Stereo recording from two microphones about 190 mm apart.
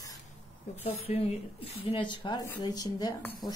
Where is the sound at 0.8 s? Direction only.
30° left (ahead or behind).